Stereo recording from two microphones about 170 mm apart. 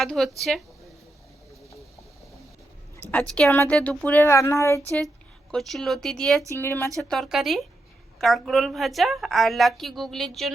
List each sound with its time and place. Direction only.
0.0 s a woman's voice: centre (ahead or behind)
3.0 s a woman's voice: 10° left (ahead or behind)
5.5 s a woman's voice: centre (ahead or behind)
6.6 s a woman's voice: 15° left (ahead or behind)
7.1 s a woman's voice: centre (ahead or behind)